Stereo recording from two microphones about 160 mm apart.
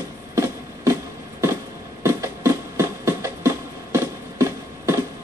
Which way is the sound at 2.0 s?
15° right (ahead or behind).